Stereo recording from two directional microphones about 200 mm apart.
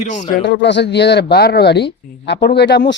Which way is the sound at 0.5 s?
60° left (ahead or behind).